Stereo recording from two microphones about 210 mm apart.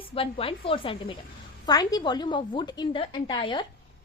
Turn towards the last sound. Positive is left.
turn(degrees=20)  # may be behind; listen again after turning